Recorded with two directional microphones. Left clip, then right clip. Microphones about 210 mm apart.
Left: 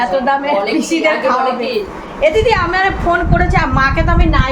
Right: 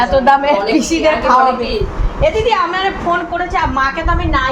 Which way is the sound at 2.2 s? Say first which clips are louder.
Left 1 dB; centre (ahead or behind).